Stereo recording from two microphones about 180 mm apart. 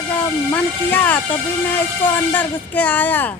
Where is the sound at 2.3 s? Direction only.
10° left (ahead or behind).